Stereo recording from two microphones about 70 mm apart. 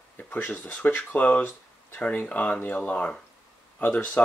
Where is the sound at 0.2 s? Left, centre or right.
Left.